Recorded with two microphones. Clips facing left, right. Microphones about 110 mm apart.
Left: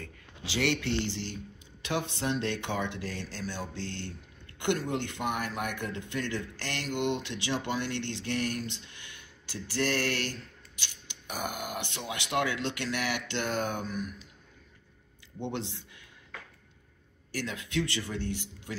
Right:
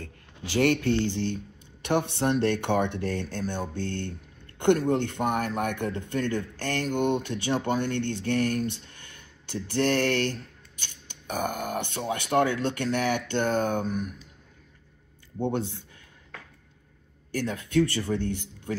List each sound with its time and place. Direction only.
0.4 s speech: 45° right (ahead or behind)
1.8 s speech: 55° right (ahead or behind)
17.4 s speech: 50° right (ahead or behind)